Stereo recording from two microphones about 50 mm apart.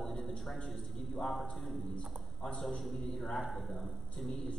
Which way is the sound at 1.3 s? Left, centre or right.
Centre.